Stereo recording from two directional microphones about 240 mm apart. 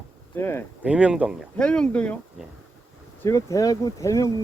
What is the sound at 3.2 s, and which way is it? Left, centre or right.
Speech, centre.